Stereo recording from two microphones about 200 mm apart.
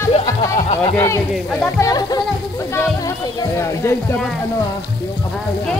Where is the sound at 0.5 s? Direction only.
35° left (ahead or behind).